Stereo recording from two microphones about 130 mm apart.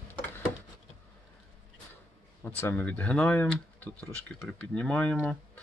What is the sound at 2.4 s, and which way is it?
Speech, 15° left (ahead or behind).